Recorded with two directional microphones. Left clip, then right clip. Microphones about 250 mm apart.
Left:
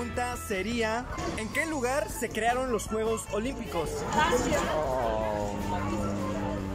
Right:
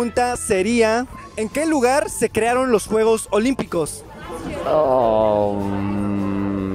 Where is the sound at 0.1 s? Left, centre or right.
Right.